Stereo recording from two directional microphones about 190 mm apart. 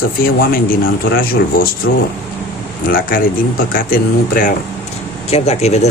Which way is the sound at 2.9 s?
45° left (ahead or behind).